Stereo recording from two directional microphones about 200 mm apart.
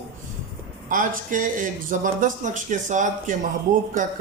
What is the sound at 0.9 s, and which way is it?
A man's voice, 40° right (ahead or behind).